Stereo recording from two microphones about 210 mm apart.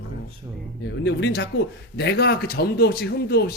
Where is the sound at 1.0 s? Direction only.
55° left (ahead or behind).